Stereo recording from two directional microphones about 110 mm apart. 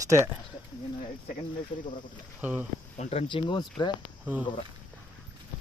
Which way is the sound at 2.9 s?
85° left.